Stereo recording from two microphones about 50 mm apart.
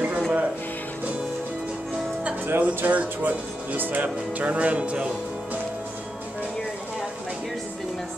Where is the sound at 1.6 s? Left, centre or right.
Centre.